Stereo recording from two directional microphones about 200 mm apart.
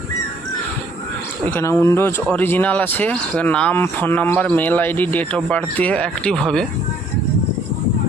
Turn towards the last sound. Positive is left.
turn(degrees=5)  # may be behind; listen again after turning